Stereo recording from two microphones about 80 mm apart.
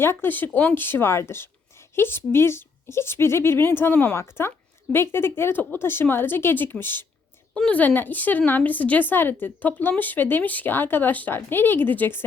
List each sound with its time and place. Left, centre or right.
0.0 s a woman's voice: left
7.5 s speech: centre